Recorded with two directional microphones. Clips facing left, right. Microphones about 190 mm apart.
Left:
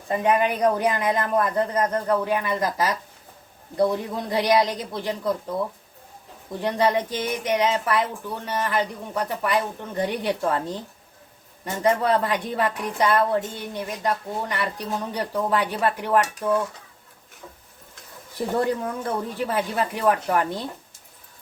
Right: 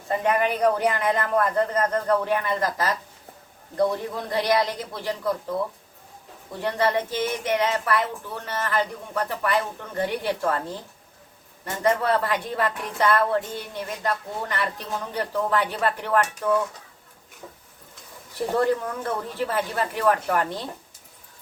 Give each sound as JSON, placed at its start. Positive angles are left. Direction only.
{"t": 0.1, "sound": "speech", "side_deg": 15}
{"t": 6.6, "sound": "speech", "side_deg": 15}
{"t": 18.6, "sound": "speech", "side_deg": 15}